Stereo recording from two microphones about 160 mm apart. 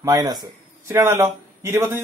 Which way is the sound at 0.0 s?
20° right (ahead or behind).